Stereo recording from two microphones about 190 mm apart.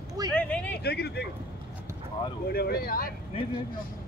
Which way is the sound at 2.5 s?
55° left (ahead or behind).